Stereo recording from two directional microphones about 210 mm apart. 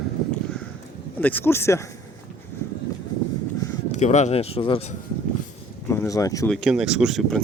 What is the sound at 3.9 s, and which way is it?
Speech, 35° left (ahead or behind).